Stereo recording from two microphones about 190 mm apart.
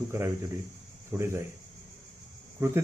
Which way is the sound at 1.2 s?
15° right (ahead or behind).